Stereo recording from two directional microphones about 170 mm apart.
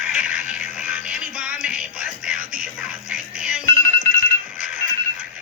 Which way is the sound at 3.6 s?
20° left (ahead or behind).